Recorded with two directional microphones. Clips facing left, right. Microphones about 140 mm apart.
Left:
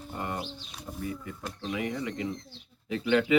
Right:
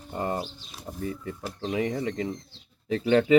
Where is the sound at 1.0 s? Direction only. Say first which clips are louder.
Right 4 dB; 30° right (ahead or behind).